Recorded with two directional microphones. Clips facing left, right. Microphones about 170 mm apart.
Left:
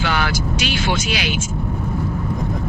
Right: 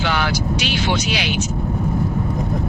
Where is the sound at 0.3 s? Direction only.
50° left (ahead or behind).